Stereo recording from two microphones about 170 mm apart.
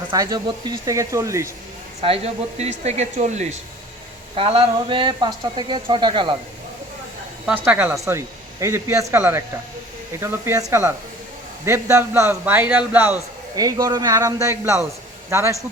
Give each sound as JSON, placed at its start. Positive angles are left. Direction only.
{"t": 0.1, "sound": "speech", "side_deg": -25}
{"t": 2.0, "sound": "speech", "side_deg": -35}
{"t": 7.4, "sound": "speech", "side_deg": -5}
{"t": 13.6, "sound": "speech", "side_deg": -20}